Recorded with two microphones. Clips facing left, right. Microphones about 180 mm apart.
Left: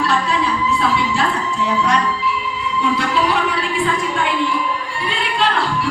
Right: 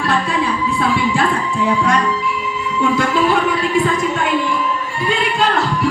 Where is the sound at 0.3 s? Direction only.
50° right (ahead or behind).